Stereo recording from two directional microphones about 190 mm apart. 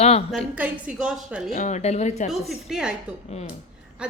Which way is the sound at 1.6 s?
40° left (ahead or behind).